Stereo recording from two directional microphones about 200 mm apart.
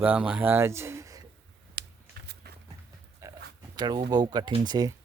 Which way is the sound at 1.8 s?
55° right (ahead or behind).